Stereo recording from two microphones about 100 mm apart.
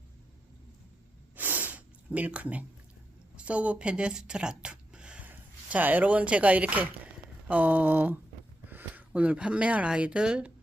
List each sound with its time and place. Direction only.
1.4 s snort: 15° right (ahead or behind)
3.3 s speech: 15° right (ahead or behind)
7.4 s a sound: 15° right (ahead or behind)
8.7 s speech: 15° right (ahead or behind)